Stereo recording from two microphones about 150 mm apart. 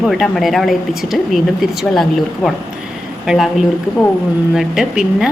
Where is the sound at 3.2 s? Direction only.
Centre (ahead or behind).